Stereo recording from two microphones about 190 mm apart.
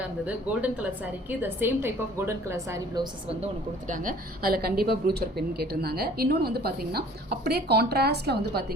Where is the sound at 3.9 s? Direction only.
45° right (ahead or behind).